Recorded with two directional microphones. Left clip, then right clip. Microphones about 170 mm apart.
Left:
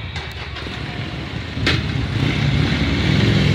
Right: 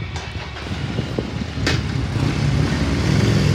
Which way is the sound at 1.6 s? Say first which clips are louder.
Left 3 dB; 45° left (ahead or behind).